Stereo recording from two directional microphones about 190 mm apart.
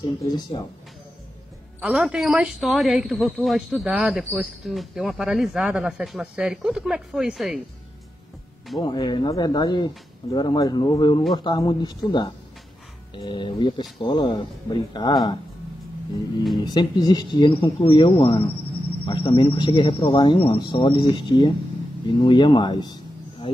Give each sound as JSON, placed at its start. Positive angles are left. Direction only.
{"t": 1.8, "sound": "speech", "side_deg": 0}
{"t": 8.7, "sound": "speech", "side_deg": 20}
{"t": 16.5, "sound": "speech", "side_deg": 20}